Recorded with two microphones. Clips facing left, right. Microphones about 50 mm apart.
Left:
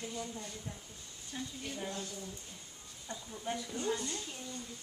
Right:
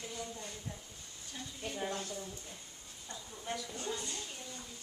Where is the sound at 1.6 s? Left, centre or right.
Centre.